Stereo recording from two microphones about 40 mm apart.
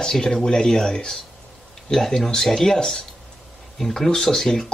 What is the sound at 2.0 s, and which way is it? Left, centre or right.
Speech, centre.